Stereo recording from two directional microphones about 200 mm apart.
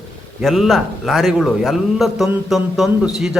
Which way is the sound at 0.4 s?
Centre (ahead or behind).